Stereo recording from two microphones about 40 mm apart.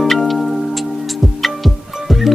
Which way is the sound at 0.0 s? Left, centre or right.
Centre.